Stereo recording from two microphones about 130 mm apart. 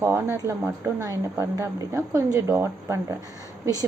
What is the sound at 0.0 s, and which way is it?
A woman's voice, 20° right (ahead or behind).